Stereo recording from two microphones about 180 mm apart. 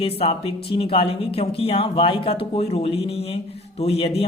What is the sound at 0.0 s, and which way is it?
Speech, 30° left (ahead or behind).